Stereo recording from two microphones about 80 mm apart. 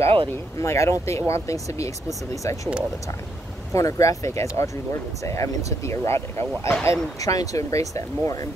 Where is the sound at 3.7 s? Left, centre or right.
Left.